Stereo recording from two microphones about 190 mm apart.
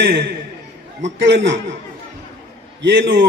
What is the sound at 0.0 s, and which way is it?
A woman's voice, 65° right (ahead or behind).